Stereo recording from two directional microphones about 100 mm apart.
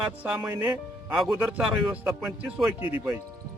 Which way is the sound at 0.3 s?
15° right (ahead or behind).